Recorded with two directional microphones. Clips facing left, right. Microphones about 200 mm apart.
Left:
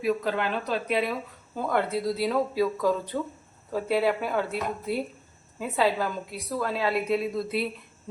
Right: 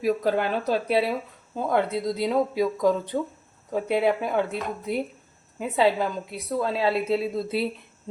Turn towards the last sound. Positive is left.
turn(degrees=-25)  # may be behind; listen again after turning